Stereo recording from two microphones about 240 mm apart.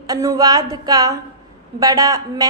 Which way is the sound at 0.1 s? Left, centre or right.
Centre.